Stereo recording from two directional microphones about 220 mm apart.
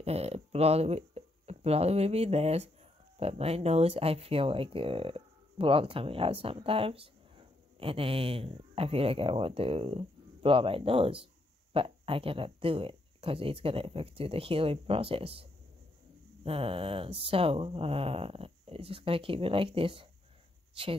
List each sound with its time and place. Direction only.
0.0 s speech: 30° right (ahead or behind)
16.4 s a woman's voice: 25° right (ahead or behind)